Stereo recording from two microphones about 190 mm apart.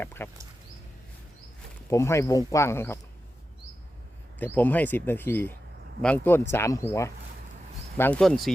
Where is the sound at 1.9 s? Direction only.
15° left (ahead or behind).